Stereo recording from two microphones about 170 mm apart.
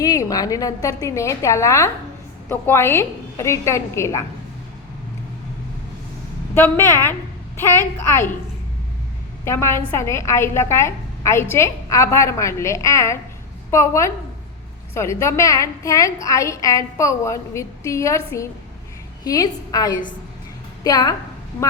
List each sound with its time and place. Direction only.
0.0 s a woman's voice: 20° left (ahead or behind)
6.5 s a woman's voice: 15° left (ahead or behind)
9.4 s a woman's voice: 15° left (ahead or behind)